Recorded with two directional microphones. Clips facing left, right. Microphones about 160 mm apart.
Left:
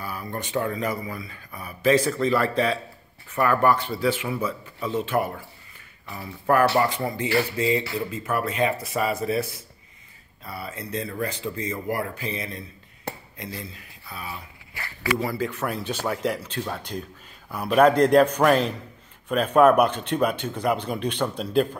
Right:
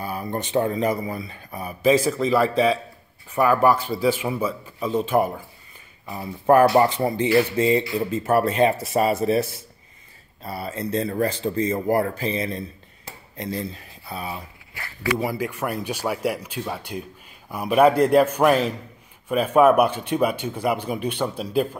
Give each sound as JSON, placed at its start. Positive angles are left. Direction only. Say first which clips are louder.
{"t": 0.0, "sound": "speech", "louder": "right 4 dB", "side_deg": -25}
{"t": 1.8, "sound": "speech", "louder": "right 2 dB", "side_deg": -10}
{"t": 6.1, "sound": "speech", "louder": "right 5 dB", "side_deg": -25}
{"t": 13.1, "sound": "a sound", "louder": "left 8 dB", "side_deg": 60}
{"t": 13.4, "sound": "speech", "louder": "right 7 dB", "side_deg": -30}
{"t": 15.1, "sound": "speech", "louder": "right 1 dB", "side_deg": -15}